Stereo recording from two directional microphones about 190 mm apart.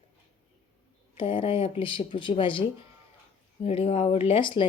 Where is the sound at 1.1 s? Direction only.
25° left (ahead or behind).